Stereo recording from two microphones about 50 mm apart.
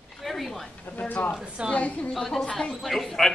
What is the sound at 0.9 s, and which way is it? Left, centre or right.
Speech, left.